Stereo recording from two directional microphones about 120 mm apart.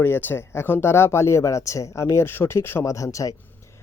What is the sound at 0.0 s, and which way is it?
Speech, 15° left (ahead or behind).